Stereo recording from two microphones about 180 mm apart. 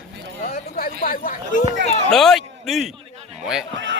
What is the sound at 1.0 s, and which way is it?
Speech, 50° left (ahead or behind).